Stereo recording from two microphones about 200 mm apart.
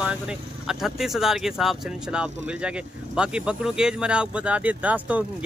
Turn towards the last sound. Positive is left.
turn(degrees=-5)  # may be behind; listen again after turning